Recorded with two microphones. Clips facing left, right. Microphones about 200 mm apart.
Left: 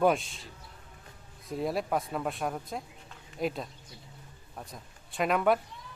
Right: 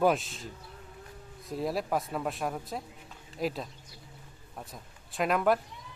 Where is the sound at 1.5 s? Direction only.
Centre (ahead or behind).